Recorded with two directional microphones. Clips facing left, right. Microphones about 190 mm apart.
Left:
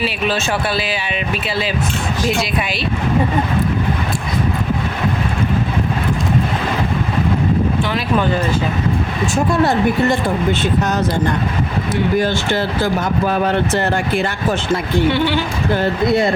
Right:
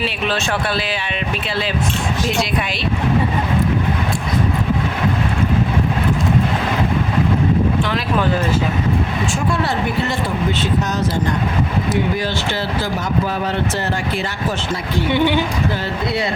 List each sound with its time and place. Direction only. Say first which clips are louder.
2.2 s speech: left 2 dB; centre (ahead or behind)
9.5 s speech: left 7 dB; 45° left (ahead or behind)
12.1 s speech: left 5 dB; 50° left (ahead or behind)
15.1 s speech: right 1 dB; 15° right (ahead or behind)
15.7 s speech: left 6 dB; 50° left (ahead or behind)